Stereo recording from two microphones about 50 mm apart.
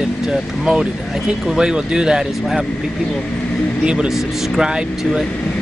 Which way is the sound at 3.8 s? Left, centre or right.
Centre.